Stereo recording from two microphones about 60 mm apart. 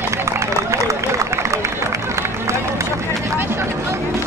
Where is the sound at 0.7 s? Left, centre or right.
Right.